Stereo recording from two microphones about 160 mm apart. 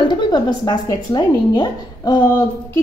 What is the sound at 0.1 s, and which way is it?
Speech, 25° left (ahead or behind).